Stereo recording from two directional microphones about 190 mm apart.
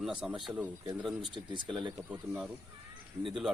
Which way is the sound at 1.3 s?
25° right (ahead or behind).